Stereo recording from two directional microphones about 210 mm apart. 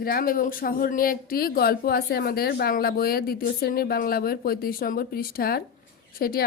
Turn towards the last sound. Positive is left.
turn(degrees=45)  # may be behind; listen again after turning